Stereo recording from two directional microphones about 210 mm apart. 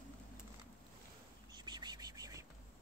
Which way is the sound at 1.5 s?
20° right (ahead or behind).